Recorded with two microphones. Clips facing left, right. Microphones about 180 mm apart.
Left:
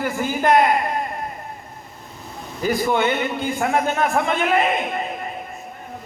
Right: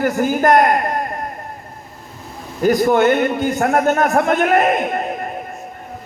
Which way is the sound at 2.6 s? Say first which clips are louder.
Right 7 dB; 45° right (ahead or behind).